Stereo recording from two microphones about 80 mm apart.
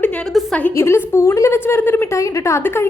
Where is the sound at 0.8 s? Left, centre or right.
Left.